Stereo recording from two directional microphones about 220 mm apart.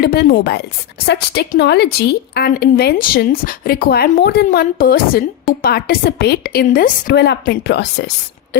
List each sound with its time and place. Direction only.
0.0 s a woman's voice: 45° left (ahead or behind)